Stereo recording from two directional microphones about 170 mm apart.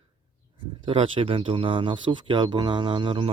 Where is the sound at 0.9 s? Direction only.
35° right (ahead or behind).